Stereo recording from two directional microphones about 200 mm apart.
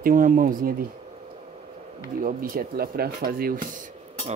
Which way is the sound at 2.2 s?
45° right (ahead or behind).